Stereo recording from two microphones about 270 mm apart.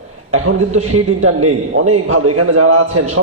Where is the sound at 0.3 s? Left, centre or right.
Right.